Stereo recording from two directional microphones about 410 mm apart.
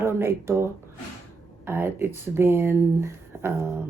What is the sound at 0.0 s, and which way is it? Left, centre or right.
Speech, centre.